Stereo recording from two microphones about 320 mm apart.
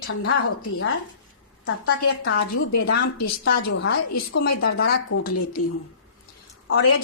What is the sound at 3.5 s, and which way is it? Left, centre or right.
A woman's voice, left.